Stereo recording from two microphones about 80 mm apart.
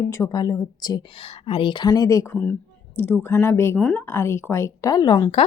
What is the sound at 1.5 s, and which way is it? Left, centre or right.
Speech, left.